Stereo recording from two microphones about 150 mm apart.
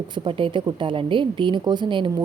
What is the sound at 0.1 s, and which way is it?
A woman's voice, 35° right (ahead or behind).